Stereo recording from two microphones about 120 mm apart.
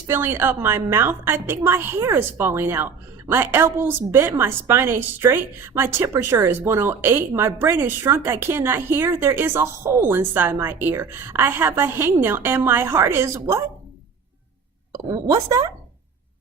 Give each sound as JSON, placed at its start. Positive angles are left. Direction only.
{"t": 0.1, "sound": "a woman's voice", "side_deg": -20}
{"t": 14.9, "sound": "a woman's voice", "side_deg": -30}